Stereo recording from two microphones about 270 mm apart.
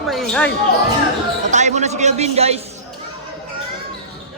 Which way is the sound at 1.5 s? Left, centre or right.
Right.